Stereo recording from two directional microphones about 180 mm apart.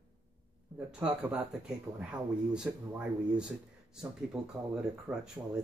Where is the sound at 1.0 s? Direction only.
5° right (ahead or behind).